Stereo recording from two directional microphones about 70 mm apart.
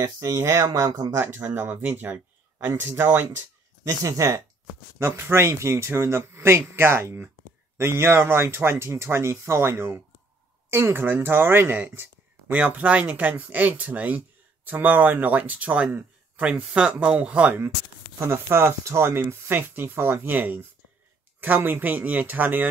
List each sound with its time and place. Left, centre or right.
0.0 s speech: right
1.1 s speech: right
2.6 s speech: right
3.8 s speech: right
4.9 s speech: right; by 17.6 s centre
18.2 s speech: right